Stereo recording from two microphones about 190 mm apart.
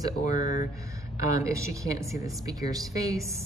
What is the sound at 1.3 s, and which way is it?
Speech, 15° right (ahead or behind).